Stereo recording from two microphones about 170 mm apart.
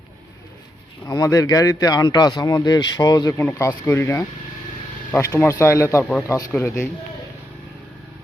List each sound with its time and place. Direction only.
1.0 s speech: 20° left (ahead or behind)
3.3 s speech: 10° left (ahead or behind)